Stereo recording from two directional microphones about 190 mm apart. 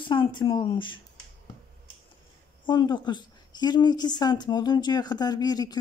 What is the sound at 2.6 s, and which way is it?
Speech, 20° left (ahead or behind).